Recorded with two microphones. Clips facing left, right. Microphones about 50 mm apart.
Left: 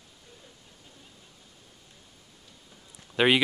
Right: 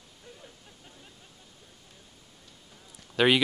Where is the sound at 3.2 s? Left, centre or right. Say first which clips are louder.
Even; left.